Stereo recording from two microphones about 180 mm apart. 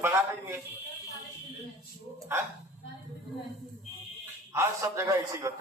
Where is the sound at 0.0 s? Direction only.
15° right (ahead or behind).